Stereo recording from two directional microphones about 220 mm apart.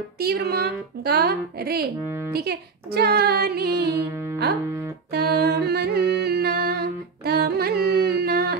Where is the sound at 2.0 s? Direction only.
10° right (ahead or behind).